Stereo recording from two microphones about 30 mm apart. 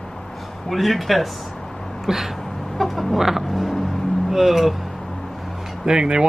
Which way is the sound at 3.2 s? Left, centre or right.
Centre.